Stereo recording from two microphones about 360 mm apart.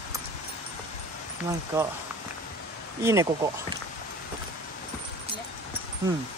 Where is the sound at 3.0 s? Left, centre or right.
Centre.